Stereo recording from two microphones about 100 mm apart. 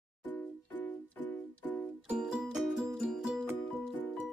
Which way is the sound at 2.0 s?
5° right (ahead or behind).